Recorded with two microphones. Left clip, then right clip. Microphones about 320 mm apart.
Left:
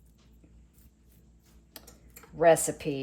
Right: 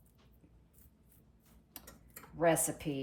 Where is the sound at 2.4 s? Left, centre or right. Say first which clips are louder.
Left 9 dB; left.